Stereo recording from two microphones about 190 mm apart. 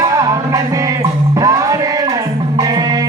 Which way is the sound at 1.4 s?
15° right (ahead or behind).